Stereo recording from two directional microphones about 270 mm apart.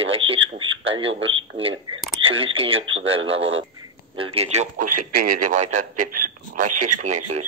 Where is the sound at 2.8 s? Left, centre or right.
Right.